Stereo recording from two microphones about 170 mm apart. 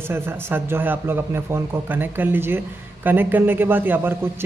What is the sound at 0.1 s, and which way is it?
A man's voice, 15° right (ahead or behind).